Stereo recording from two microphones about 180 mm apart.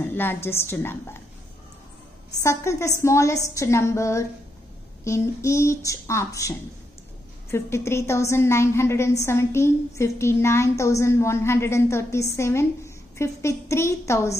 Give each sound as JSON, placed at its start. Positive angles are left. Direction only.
{"t": 0.0, "sound": "a woman's voice", "side_deg": 10}
{"t": 2.4, "sound": "a woman's voice", "side_deg": 15}
{"t": 7.5, "sound": "a woman's voice", "side_deg": 15}